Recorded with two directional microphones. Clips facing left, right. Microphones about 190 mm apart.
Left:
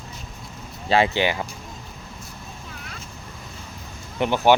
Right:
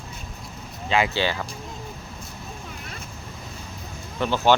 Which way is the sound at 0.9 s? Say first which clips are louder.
Left 3 dB; 30° left (ahead or behind).